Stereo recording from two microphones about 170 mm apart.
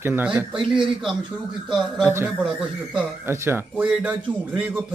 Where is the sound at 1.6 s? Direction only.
Centre (ahead or behind).